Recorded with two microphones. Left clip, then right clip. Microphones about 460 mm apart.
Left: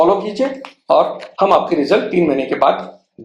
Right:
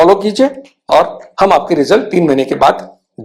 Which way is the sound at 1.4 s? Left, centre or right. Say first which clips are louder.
Right 4 dB; right.